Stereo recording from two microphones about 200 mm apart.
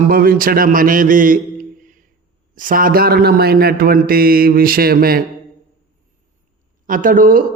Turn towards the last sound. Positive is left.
turn(degrees=-45)  # may be behind; listen again after turning